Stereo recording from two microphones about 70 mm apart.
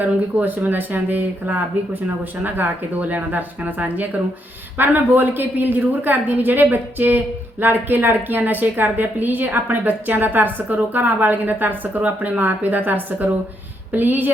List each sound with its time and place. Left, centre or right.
0.0 s a woman's voice: right